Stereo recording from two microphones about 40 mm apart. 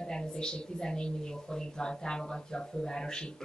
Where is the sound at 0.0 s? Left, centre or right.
Centre.